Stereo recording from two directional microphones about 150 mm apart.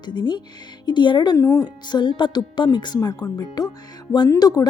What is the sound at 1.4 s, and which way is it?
A woman's voice, 20° left (ahead or behind).